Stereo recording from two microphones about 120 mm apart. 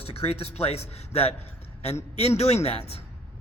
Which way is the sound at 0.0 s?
55° left (ahead or behind).